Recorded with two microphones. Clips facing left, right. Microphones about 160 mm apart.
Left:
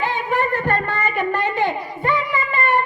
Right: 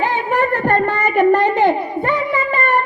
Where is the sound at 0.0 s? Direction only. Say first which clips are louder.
Right 4 dB; 50° right (ahead or behind).